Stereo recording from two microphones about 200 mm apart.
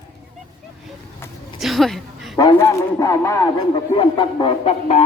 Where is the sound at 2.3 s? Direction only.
15° left (ahead or behind).